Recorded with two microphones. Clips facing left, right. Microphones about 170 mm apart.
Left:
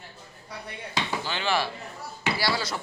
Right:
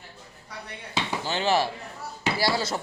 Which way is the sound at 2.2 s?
45° right (ahead or behind).